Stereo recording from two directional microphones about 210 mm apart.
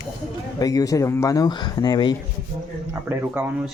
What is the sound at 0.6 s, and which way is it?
Speech, 15° left (ahead or behind).